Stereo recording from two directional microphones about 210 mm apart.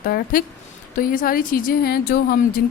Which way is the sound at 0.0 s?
40° left (ahead or behind).